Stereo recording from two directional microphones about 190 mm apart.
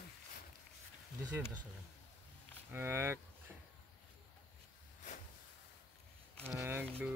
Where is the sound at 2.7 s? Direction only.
10° right (ahead or behind).